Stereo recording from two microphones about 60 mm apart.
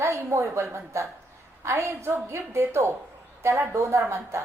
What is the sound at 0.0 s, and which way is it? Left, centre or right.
A woman's voice, right.